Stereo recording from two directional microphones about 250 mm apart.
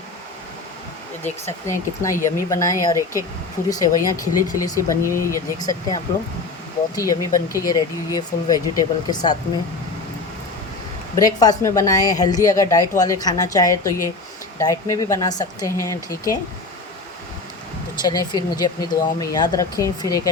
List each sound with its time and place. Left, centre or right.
1.2 s a woman's voice: centre
11.2 s a woman's voice: centre
18.0 s a woman's voice: centre